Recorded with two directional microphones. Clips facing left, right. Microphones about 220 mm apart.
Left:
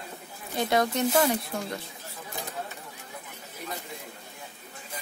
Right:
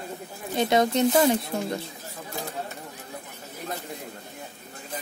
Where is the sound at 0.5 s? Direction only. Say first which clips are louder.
Right 4 dB; 20° right (ahead or behind).